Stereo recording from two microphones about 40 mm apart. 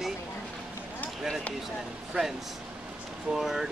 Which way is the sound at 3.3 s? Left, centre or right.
Centre.